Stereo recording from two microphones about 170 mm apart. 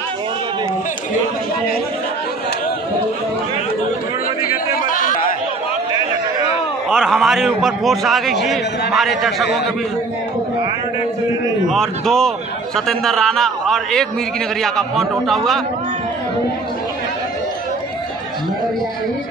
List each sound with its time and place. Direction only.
4.8 s chatter: 50° left (ahead or behind)
6.9 s a man's voice: centre (ahead or behind)
11.7 s a man's voice: 5° left (ahead or behind)